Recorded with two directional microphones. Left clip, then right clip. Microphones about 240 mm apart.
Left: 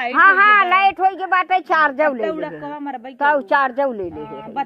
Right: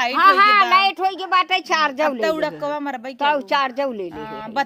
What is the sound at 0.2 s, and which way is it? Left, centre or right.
A child's voice, centre.